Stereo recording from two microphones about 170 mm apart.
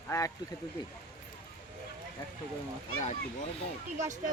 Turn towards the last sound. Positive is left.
turn(degrees=-45)  # may be behind; listen again after turning